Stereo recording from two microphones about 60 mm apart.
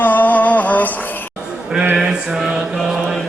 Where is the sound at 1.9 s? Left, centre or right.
Centre.